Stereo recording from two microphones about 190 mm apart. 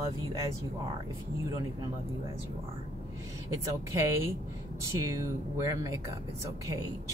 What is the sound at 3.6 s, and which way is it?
Speech, 15° right (ahead or behind).